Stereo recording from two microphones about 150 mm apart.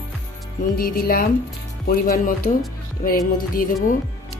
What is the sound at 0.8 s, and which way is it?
Speech, 80° left.